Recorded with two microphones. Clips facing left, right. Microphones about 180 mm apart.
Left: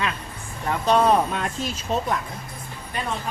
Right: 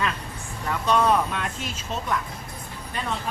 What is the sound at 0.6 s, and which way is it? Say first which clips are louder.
Speech: left 3 dB; 30° left (ahead or behind).